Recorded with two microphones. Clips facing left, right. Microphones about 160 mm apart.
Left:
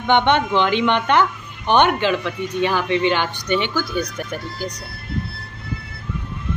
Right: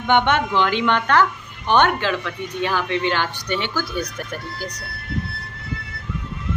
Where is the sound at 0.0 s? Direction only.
5° right (ahead or behind).